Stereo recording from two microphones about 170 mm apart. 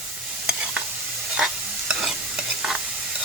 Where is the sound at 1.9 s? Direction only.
5° right (ahead or behind).